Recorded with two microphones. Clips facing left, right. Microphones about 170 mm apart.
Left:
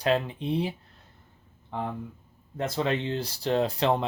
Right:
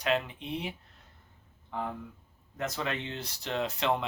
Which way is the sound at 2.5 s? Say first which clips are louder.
Left 6 dB; 30° left (ahead or behind).